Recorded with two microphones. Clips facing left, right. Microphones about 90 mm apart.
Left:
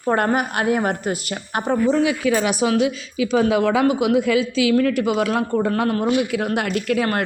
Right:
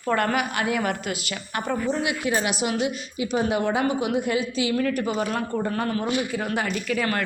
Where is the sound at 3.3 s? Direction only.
90° left.